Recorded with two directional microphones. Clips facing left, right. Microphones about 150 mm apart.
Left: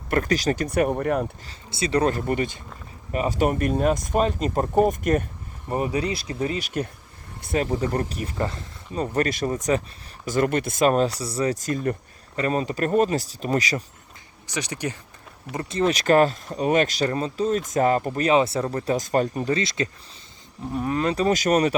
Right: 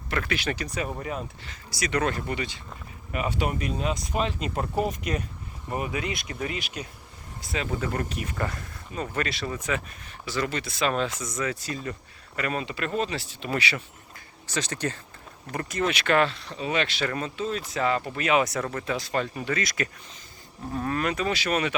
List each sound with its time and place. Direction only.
0.1 s speech: 40° left (ahead or behind); by 1.3 s 65° left (ahead or behind)
1.5 s speech: 30° left (ahead or behind)
2.2 s speech: 50° left (ahead or behind)
3.1 s speech: 35° left (ahead or behind)
5.7 s speech: 35° left (ahead or behind)
7.7 s speech: 35° left (ahead or behind)
9.1 s speech: 45° left (ahead or behind)
12.4 s speech: 35° left (ahead or behind)
14.4 s speech: 15° left (ahead or behind)
15.5 s speech: 30° left (ahead or behind)
17.1 s speech: 30° left (ahead or behind)
20.7 s speech: 15° left (ahead or behind)
21.0 s speech: 30° left (ahead or behind)